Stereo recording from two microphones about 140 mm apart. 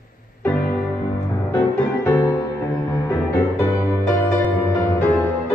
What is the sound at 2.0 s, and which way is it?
Music, 20° left (ahead or behind).